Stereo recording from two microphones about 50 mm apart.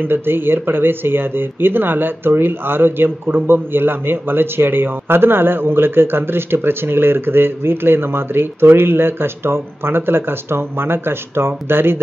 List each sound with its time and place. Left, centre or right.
0.0 s speech: right